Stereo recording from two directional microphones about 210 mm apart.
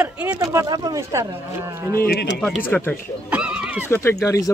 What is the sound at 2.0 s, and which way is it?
Speech, 45° left (ahead or behind).